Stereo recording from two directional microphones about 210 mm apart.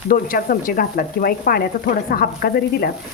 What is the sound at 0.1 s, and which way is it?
Speech, 45° left (ahead or behind).